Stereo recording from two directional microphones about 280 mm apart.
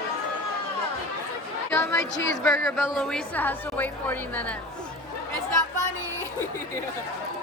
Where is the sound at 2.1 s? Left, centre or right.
Left.